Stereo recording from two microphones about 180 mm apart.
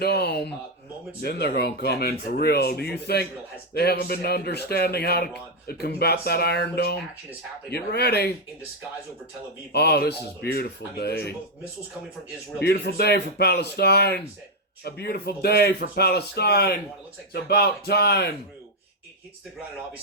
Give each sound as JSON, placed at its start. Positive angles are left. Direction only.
{"t": 0.0, "sound": "speech", "side_deg": 60}
{"t": 9.7, "sound": "speech", "side_deg": 60}
{"t": 12.6, "sound": "speech", "side_deg": 60}